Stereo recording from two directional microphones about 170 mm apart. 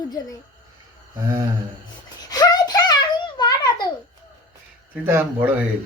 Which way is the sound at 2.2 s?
20° left (ahead or behind).